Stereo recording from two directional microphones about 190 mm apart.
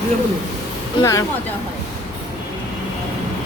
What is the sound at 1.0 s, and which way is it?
Speech, 15° left (ahead or behind).